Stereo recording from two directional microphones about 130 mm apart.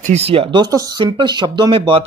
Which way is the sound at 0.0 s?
55° right (ahead or behind).